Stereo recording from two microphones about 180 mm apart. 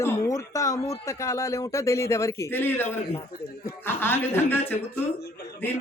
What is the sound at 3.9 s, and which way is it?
Speech, 10° left (ahead or behind).